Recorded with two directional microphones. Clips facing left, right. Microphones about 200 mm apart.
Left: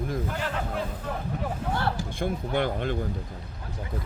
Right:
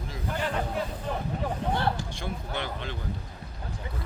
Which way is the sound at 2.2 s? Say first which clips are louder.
Left 7 dB; 50° left (ahead or behind).